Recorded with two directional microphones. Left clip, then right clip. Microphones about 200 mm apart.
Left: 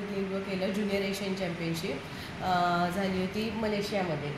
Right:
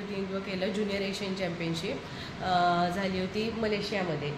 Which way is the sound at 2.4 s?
5° right (ahead or behind).